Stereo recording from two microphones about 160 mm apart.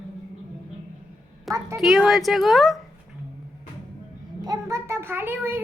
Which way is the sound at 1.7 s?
5° right (ahead or behind).